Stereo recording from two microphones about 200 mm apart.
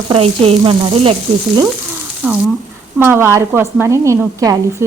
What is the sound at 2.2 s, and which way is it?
A woman's voice, 10° right (ahead or behind).